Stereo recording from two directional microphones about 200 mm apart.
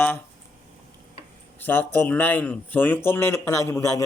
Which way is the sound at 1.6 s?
10° left (ahead or behind).